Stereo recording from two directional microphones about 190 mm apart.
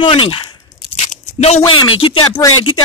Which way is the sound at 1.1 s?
35° left (ahead or behind).